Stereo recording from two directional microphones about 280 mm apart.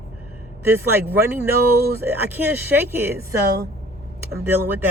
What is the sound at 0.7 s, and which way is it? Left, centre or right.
Speech, centre.